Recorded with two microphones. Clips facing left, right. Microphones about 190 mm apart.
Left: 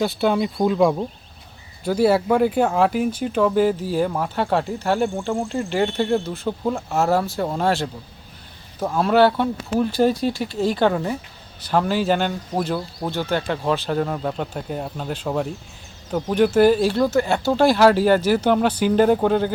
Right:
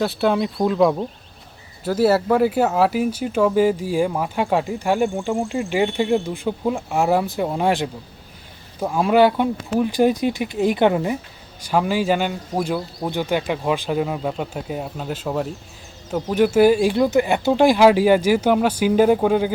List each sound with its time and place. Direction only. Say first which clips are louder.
0.0 s speech: even; centre (ahead or behind)
13.1 s speech: right 1 dB; 15° right (ahead or behind)